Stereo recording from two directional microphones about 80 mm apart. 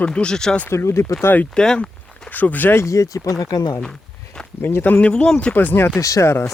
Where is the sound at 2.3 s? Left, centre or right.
Left.